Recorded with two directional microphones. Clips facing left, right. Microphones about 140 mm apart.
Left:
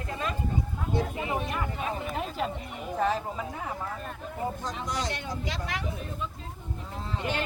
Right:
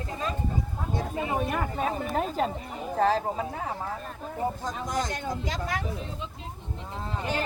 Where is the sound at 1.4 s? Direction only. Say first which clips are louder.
Right 4 dB; 45° right (ahead or behind).